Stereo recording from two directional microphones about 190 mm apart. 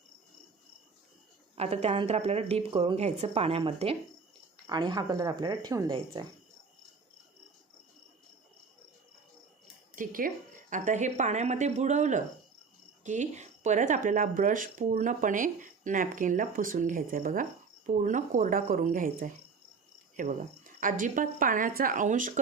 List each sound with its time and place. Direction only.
1.5 s a woman's voice: 35° right (ahead or behind)
9.9 s a woman's voice: 45° right (ahead or behind)